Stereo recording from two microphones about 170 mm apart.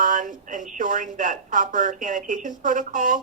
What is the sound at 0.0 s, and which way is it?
Speech, 50° right (ahead or behind).